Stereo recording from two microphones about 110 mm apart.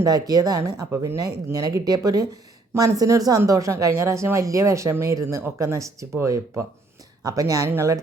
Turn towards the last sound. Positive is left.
turn(degrees=-25)  # may be behind; listen again after turning